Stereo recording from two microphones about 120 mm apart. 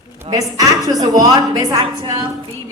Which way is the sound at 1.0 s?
35° right (ahead or behind).